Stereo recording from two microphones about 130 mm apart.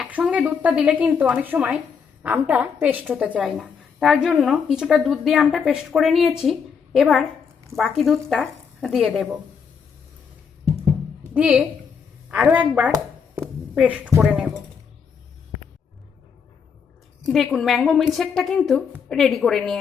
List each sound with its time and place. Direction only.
0.0 s a woman's voice: 10° right (ahead or behind)
11.3 s speech: 10° right (ahead or behind)
17.3 s a woman's voice: centre (ahead or behind)